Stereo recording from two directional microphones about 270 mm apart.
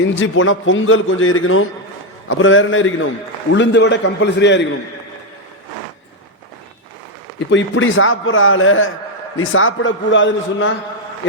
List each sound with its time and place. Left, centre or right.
0.1 s a man's voice: left
7.3 s a man's voice: left